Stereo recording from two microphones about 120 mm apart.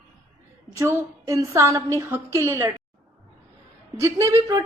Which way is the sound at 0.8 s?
25° right (ahead or behind).